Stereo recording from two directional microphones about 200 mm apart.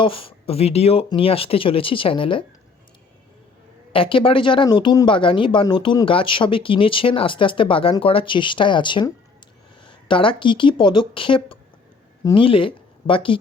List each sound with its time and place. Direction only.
0.0 s speech: 25° left (ahead or behind)
3.9 s speech: 25° left (ahead or behind)